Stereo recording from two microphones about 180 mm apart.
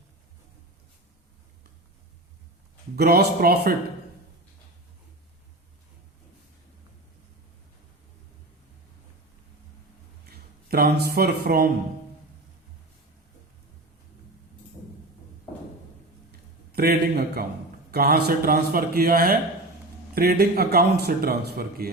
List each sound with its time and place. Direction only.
2.9 s a man's voice: 60° right (ahead or behind)
10.2 s speech: 55° right (ahead or behind)
16.7 s a man's voice: 60° right (ahead or behind)